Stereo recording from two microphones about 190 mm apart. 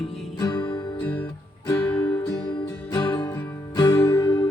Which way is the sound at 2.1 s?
20° left (ahead or behind).